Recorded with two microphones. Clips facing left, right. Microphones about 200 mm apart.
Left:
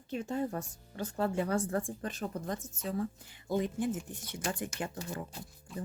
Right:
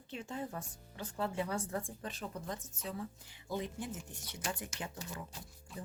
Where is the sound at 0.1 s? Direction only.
45° left (ahead or behind).